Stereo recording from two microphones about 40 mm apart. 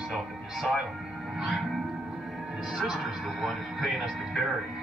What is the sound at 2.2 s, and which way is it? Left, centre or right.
Music, centre.